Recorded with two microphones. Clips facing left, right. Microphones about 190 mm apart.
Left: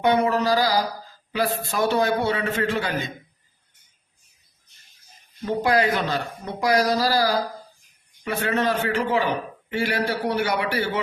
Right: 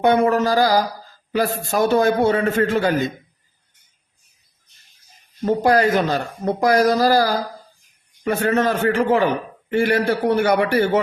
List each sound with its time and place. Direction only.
0.0 s a man's voice: 50° right (ahead or behind)
5.5 s a man's voice: 45° right (ahead or behind)